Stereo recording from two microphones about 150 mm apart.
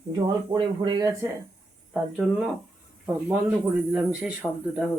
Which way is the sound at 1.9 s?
5° right (ahead or behind).